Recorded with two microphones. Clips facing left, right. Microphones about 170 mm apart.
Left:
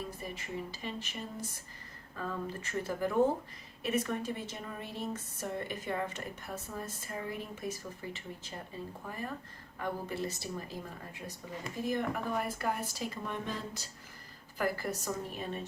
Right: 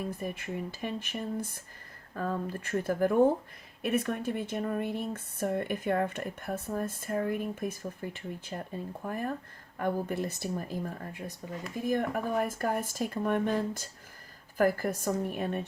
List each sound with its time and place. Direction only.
0.0 s speech: 55° right (ahead or behind)